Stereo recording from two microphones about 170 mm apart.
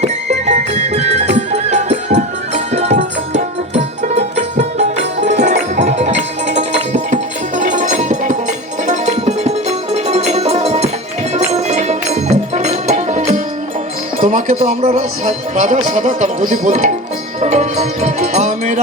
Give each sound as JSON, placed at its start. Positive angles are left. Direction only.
{"t": 0.0, "sound": "music", "side_deg": -45}
{"t": 14.2, "sound": "speech", "side_deg": -50}
{"t": 17.4, "sound": "music", "side_deg": -40}